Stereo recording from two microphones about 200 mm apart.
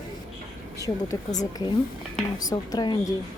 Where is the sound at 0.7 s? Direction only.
15° left (ahead or behind).